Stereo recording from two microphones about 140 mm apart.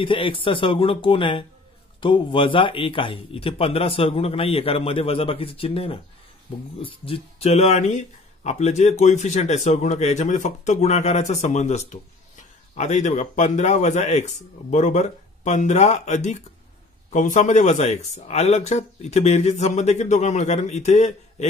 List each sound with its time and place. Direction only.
0.0 s a man's voice: 40° left (ahead or behind); by 21.5 s 55° left (ahead or behind)